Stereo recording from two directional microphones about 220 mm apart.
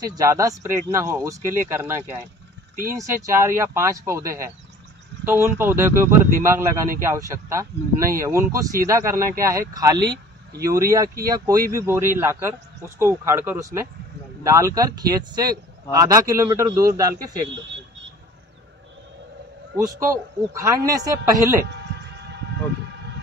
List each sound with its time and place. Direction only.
0.0 s a man's voice: 15° right (ahead or behind)
9.9 s a sound: 50° right (ahead or behind)
10.6 s a man's voice: 15° right (ahead or behind)
20.1 s a man's voice: 15° right (ahead or behind)
21.6 s music: 50° right (ahead or behind)